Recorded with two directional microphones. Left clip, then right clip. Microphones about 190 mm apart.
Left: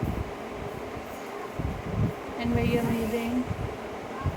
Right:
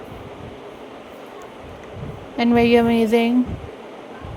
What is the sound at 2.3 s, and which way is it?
Speech, 60° right (ahead or behind).